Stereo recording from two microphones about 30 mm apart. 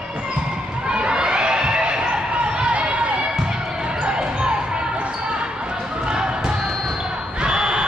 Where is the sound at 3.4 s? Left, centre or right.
Right.